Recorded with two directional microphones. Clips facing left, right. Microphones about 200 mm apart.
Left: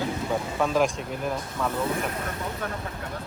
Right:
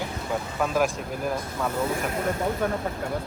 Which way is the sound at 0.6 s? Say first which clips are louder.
Left 1 dB; 5° right (ahead or behind).